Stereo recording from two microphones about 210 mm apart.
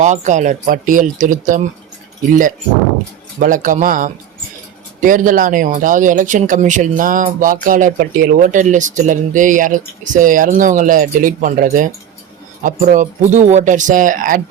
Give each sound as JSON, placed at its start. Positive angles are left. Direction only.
{"t": 0.0, "sound": "speech", "side_deg": -35}
{"t": 3.4, "sound": "speech", "side_deg": -40}